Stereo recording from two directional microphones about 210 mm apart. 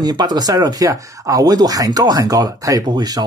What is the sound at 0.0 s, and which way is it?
Speech, 20° right (ahead or behind).